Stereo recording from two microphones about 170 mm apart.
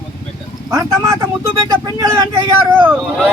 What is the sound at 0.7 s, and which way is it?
Speech, 15° right (ahead or behind).